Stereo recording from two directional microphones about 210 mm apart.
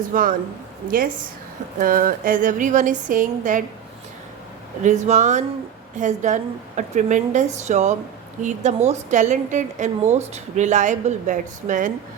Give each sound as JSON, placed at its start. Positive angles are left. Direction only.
{"t": 0.1, "sound": "a woman's voice", "side_deg": -40}
{"t": 1.8, "sound": "a woman's voice", "side_deg": -40}
{"t": 4.8, "sound": "a woman's voice", "side_deg": -35}